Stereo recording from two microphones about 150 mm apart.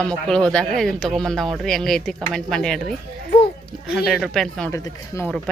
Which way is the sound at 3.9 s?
Centre (ahead or behind).